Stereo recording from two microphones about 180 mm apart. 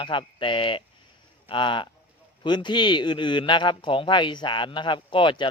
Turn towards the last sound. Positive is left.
turn(degrees=25)  # may be behind; listen again after turning